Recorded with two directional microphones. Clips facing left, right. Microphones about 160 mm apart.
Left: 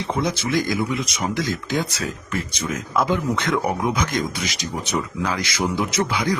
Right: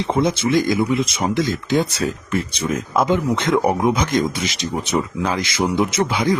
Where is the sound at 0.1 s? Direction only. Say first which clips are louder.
Right 5 dB; 25° right (ahead or behind).